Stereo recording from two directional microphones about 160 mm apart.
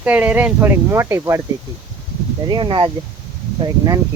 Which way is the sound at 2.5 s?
30° right (ahead or behind).